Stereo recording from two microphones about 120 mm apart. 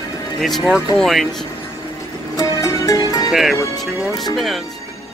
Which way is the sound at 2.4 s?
25° left (ahead or behind).